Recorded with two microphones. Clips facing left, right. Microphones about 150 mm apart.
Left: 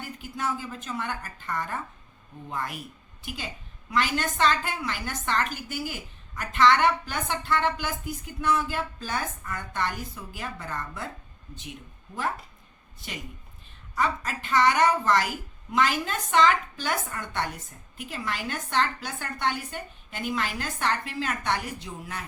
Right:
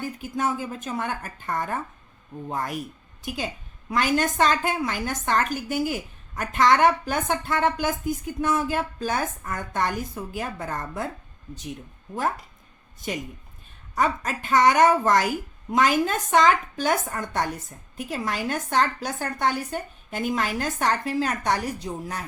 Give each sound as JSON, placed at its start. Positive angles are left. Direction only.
{"t": 0.2, "sound": "a woman's voice", "side_deg": -45}
{"t": 13.9, "sound": "a woman's voice", "side_deg": -45}